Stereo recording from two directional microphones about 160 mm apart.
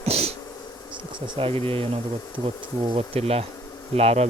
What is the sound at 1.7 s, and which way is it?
Speech, 35° right (ahead or behind).